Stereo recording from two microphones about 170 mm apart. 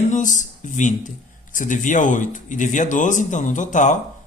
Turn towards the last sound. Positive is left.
turn(degrees=45)  # may be behind; listen again after turning